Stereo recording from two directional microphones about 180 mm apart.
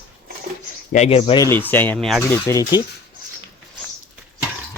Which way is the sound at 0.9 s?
35° left (ahead or behind).